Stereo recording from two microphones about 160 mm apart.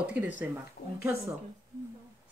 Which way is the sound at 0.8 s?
75° left (ahead or behind).